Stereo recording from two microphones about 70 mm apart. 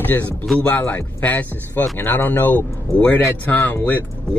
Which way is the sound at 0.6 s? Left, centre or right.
Left.